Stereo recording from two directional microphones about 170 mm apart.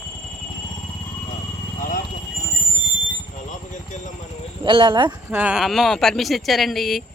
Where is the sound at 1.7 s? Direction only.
50° left (ahead or behind).